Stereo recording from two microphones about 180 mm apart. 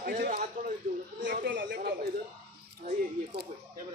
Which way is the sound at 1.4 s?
75° right (ahead or behind).